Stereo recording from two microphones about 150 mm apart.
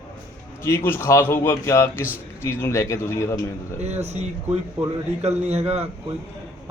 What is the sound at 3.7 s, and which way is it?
A man's voice, 45° right (ahead or behind).